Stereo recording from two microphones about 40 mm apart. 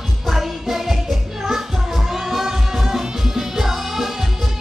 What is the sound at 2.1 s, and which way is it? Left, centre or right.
Music, centre.